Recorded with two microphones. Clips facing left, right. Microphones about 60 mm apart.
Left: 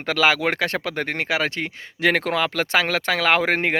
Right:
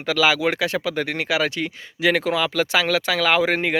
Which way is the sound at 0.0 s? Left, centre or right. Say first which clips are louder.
Even; left.